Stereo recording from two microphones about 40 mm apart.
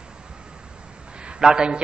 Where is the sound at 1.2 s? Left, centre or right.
Right.